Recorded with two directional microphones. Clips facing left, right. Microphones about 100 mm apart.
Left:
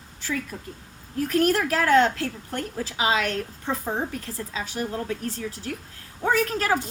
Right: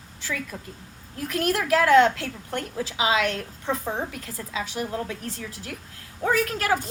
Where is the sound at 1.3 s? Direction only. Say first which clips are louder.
Left 1 dB; 40° left (ahead or behind).